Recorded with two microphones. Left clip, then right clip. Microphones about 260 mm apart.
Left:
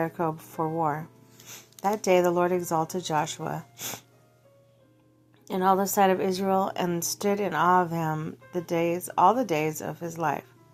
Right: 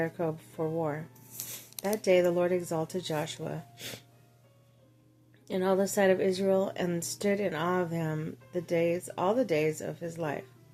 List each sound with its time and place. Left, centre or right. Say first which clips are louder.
0.0 s a woman's voice: left 4 dB; centre
1.5 s a sound: left 7 dB; centre
2.0 s a woman's voice: left 2 dB; centre
5.5 s a woman's voice: left 5 dB; centre